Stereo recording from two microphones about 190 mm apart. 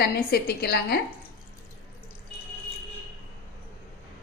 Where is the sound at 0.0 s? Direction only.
55° left (ahead or behind).